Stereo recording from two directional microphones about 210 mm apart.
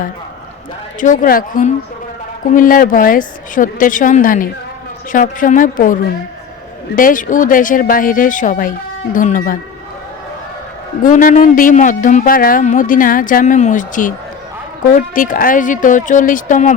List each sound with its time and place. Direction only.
0.9 s speech: 40° left (ahead or behind)
11.0 s speech: 40° left (ahead or behind)